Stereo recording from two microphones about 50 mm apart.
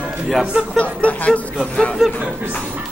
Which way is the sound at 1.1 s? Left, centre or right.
Left.